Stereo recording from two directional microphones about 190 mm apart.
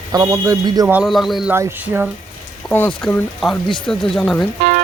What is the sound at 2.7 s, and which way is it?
Speech, 10° left (ahead or behind).